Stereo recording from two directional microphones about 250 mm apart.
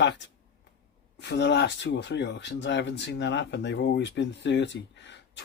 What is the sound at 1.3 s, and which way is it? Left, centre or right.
Speech, left.